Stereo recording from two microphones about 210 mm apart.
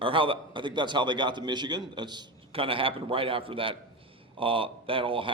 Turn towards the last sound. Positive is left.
turn(degrees=-25)  # may be behind; listen again after turning